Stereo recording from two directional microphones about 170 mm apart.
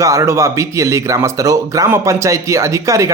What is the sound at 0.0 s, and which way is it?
Speech, 15° right (ahead or behind).